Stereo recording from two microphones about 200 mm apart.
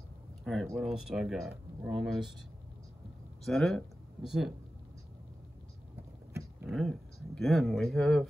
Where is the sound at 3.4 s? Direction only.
Centre (ahead or behind).